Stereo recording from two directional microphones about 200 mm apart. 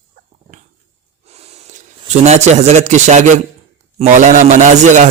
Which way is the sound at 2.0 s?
35° right (ahead or behind).